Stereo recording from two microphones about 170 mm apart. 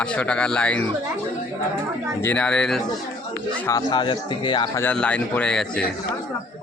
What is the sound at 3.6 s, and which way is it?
Speech, 25° left (ahead or behind).